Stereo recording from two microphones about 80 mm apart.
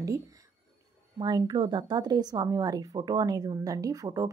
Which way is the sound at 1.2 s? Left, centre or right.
Right.